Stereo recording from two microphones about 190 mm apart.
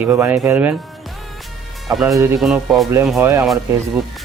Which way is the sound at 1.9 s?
Centre (ahead or behind).